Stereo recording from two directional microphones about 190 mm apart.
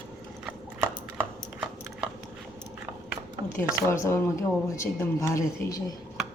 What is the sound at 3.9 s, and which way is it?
Speech, 15° left (ahead or behind).